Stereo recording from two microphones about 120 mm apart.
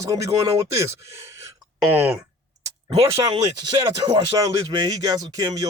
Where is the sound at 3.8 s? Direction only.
30° right (ahead or behind).